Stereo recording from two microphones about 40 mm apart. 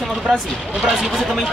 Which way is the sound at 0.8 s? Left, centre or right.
Centre.